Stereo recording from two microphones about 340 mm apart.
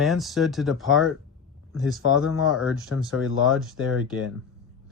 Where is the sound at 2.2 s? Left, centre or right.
Left.